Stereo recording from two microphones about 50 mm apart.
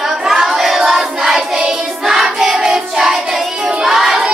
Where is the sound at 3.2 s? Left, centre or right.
Centre.